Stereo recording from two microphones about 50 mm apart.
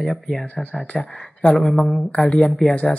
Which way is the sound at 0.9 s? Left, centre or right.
Left.